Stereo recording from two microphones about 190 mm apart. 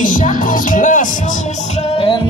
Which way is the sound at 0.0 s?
45° left (ahead or behind).